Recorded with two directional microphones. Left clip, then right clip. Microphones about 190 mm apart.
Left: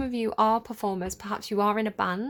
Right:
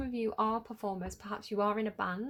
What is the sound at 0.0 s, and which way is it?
Speech, 40° left (ahead or behind).